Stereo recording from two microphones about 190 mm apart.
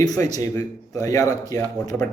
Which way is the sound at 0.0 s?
20° left (ahead or behind).